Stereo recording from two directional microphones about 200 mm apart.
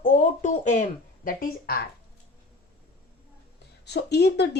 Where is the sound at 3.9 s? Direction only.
55° left (ahead or behind).